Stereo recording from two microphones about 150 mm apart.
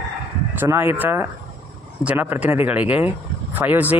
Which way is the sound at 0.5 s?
15° right (ahead or behind).